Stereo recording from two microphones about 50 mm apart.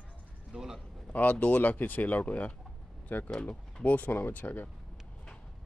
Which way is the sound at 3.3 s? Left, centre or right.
Centre.